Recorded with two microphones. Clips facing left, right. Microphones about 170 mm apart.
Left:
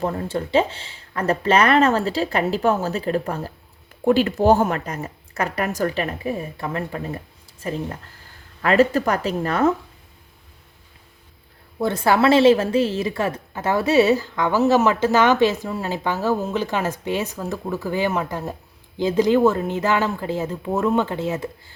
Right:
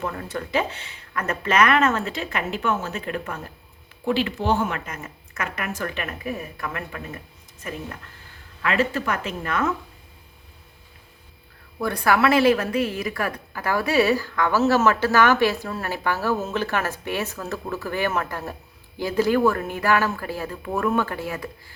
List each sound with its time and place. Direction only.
0.0 s speech: 30° left (ahead or behind)
4.0 s speech: 45° left (ahead or behind)
8.6 s speech: 40° left (ahead or behind)
11.8 s a woman's voice: 25° left (ahead or behind)